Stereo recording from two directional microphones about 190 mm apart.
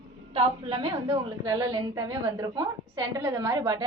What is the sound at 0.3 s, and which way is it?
A woman's voice, 25° right (ahead or behind).